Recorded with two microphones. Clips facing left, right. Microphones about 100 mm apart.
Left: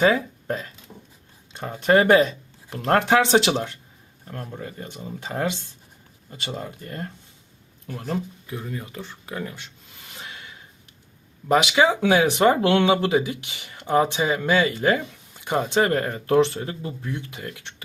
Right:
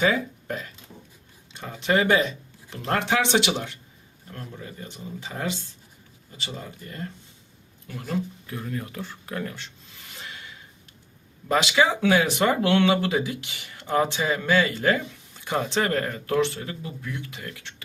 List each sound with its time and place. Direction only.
0.1 s speech: 30° left (ahead or behind)
1.5 s speech: 45° left (ahead or behind)
4.3 s speech: 45° left (ahead or behind)
8.6 s speech: 5° left (ahead or behind)
11.4 s speech: 25° left (ahead or behind)